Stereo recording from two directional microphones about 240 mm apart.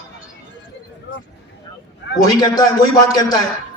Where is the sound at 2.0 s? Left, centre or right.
Left.